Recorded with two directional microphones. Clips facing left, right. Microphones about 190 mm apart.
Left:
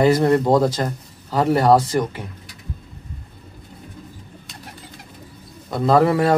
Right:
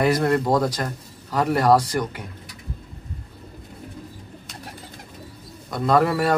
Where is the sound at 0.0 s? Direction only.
30° left (ahead or behind).